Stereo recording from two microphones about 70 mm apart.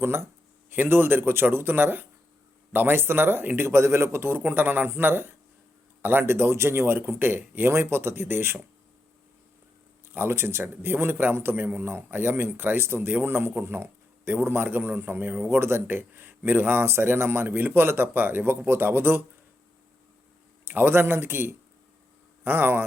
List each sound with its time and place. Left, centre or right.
0.0 s a man's voice: right
10.1 s a man's voice: right
20.7 s a man's voice: right